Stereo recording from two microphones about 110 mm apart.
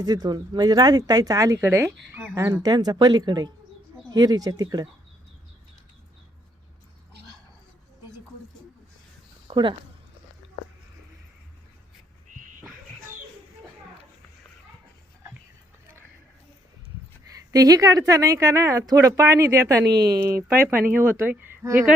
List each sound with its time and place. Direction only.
0.0 s speech: 40° right (ahead or behind)
2.6 s speech: 40° right (ahead or behind)
9.5 s speech: 45° right (ahead or behind)
17.5 s speech: 35° right (ahead or behind)
20.2 s speech: 20° right (ahead or behind)